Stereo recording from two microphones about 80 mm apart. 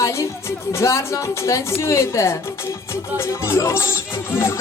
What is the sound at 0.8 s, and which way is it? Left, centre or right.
Music, left.